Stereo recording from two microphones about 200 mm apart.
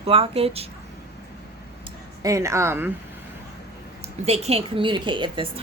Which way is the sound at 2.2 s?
15° right (ahead or behind).